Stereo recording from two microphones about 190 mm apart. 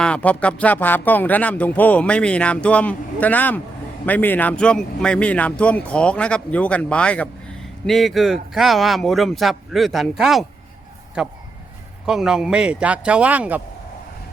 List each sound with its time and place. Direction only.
0.0 s speech: 5° left (ahead or behind)